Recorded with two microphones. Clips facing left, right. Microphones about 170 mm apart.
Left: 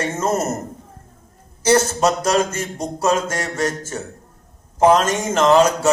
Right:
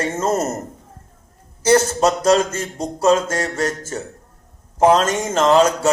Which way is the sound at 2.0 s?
30° right (ahead or behind).